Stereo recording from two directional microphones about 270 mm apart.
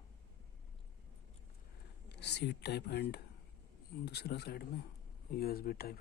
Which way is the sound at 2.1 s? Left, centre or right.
Left.